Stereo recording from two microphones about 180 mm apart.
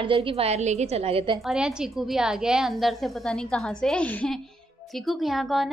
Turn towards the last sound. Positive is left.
turn(degrees=0)  # may be behind; listen again after turning